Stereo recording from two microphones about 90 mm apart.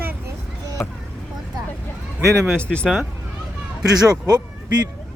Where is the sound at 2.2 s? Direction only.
25° right (ahead or behind).